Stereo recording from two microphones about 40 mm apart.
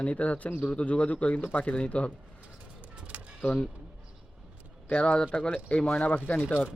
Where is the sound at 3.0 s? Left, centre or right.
Right.